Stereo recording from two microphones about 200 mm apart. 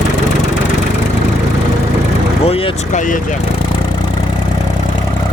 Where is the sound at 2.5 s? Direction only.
30° left (ahead or behind).